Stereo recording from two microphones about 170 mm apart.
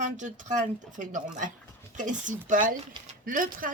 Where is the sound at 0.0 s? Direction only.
45° right (ahead or behind).